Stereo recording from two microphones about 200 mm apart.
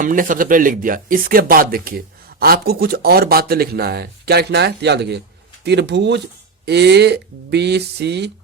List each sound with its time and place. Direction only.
0.0 s speech: 40° right (ahead or behind)